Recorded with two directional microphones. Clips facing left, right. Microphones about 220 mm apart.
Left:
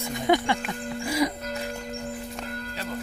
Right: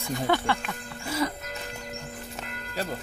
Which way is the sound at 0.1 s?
15° left (ahead or behind).